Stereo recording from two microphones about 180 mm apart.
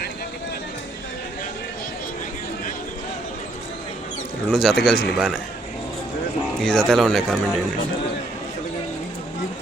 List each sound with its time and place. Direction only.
4.5 s speech: 5° left (ahead or behind)
6.6 s speech: centre (ahead or behind)